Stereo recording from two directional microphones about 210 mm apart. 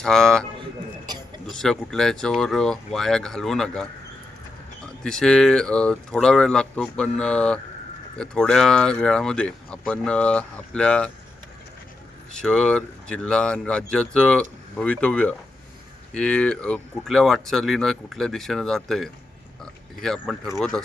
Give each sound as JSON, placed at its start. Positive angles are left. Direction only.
{"t": 0.0, "sound": "speech", "side_deg": 0}
{"t": 1.0, "sound": "a sound", "side_deg": -20}
{"t": 1.5, "sound": "speech", "side_deg": 0}
{"t": 5.0, "sound": "speech", "side_deg": 5}
{"t": 12.3, "sound": "speech", "side_deg": 5}